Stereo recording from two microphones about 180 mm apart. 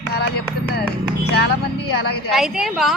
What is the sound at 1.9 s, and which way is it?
Speech, 65° left (ahead or behind).